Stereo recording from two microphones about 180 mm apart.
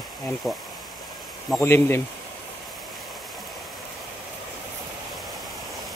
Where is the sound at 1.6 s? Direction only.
15° left (ahead or behind).